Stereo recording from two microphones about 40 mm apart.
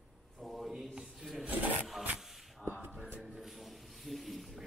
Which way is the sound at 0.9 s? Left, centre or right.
Centre.